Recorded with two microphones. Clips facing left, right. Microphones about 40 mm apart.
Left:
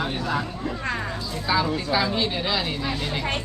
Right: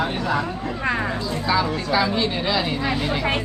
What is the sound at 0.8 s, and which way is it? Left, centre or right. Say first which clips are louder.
Speech: right 7 dB; centre.